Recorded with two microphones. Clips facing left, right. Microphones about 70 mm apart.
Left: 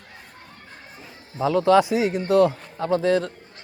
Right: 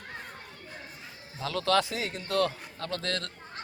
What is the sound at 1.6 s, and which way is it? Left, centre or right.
A man's voice, centre.